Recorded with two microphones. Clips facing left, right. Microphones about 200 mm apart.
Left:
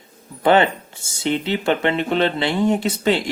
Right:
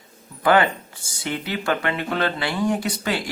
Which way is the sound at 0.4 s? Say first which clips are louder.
Left 3 dB; 25° left (ahead or behind).